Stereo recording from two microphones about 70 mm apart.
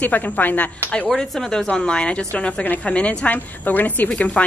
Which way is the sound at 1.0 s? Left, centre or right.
Centre.